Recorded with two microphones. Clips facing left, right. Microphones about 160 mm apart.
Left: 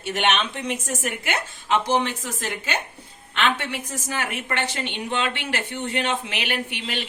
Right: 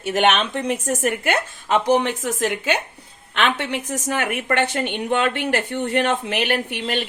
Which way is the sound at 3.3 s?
50° right (ahead or behind).